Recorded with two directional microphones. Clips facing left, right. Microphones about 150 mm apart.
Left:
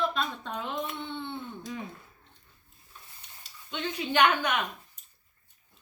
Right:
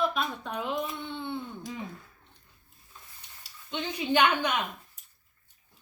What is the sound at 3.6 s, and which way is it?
Speech, 20° right (ahead or behind).